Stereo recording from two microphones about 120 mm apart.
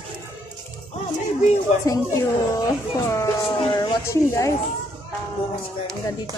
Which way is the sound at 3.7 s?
25° left (ahead or behind).